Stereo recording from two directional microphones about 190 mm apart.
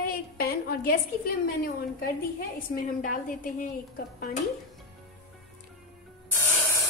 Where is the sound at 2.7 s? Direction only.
45° left (ahead or behind).